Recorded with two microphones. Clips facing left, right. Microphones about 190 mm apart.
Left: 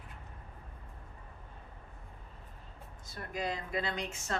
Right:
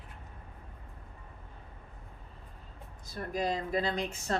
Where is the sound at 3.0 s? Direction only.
35° right (ahead or behind).